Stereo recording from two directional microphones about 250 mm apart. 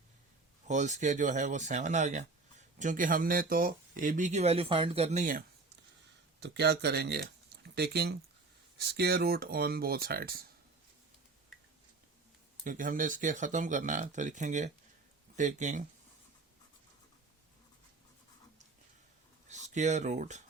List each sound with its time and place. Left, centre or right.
0.7 s speech: right
6.4 s speech: right
12.6 s speech: right
19.5 s speech: right